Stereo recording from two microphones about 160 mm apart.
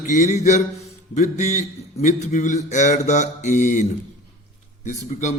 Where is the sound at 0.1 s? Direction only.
50° left (ahead or behind).